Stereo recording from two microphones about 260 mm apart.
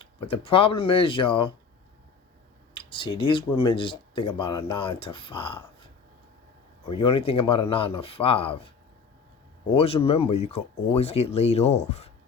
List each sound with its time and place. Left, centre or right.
0.0 s speech: left
2.7 s speech: centre
9.7 s speech: left